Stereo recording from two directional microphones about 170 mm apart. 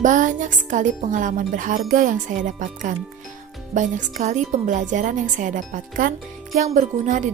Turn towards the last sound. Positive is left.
turn(degrees=-45)  # may be behind; listen again after turning